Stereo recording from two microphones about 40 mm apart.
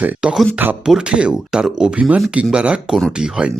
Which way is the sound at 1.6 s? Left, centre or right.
Centre.